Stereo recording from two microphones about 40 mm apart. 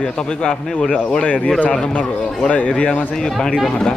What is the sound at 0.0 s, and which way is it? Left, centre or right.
Speech, left.